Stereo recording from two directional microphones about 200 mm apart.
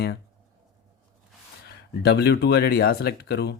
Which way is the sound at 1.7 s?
55° left (ahead or behind).